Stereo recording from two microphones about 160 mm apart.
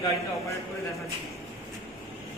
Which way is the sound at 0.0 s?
20° left (ahead or behind).